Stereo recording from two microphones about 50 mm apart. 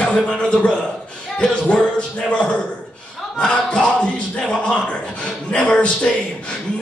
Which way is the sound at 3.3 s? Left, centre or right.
Centre.